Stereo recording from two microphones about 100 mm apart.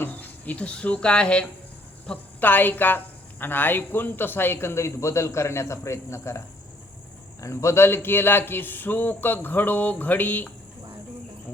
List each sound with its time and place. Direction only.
0.0 s a woman's voice: 20° left (ahead or behind)
7.4 s a woman's voice: 30° left (ahead or behind)